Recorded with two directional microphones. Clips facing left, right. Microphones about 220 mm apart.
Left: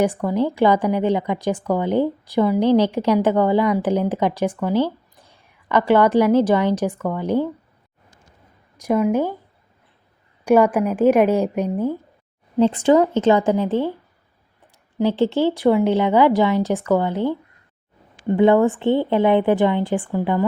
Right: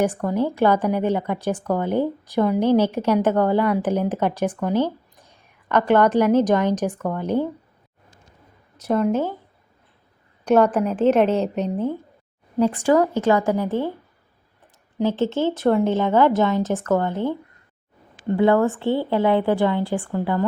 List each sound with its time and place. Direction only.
0.0 s speech: 10° left (ahead or behind)
4.7 s a sound: 15° right (ahead or behind)
5.6 s speech: 10° left (ahead or behind)
8.8 s speech: 10° left (ahead or behind)
10.4 s speech: 10° left (ahead or behind)
12.5 s speech: 25° left (ahead or behind)
14.9 s speech: 15° left (ahead or behind)
18.3 s speech: 15° left (ahead or behind)